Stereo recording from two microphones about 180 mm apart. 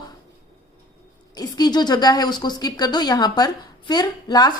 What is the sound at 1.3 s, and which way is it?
A woman's voice, 20° left (ahead or behind).